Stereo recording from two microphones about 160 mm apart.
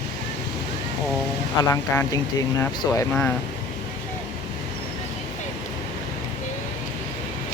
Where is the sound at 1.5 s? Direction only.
20° left (ahead or behind).